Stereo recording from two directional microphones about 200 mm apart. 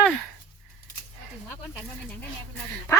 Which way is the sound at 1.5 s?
10° left (ahead or behind).